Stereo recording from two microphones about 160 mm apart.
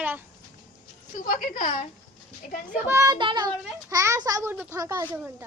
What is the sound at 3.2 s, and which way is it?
A child's voice, 30° right (ahead or behind).